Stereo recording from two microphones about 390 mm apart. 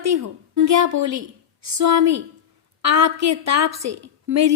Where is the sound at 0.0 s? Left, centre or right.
Right.